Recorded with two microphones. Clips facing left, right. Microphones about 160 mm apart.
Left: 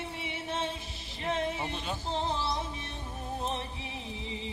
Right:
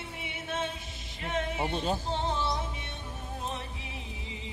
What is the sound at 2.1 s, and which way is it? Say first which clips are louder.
Music: right 1 dB; 35° left (ahead or behind).